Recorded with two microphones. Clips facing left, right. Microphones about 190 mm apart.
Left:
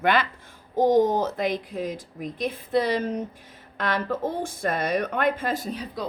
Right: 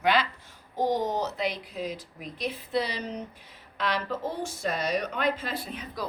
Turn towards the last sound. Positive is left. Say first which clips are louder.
# left 7 dB
turn(degrees=40)  # may be behind; listen again after turning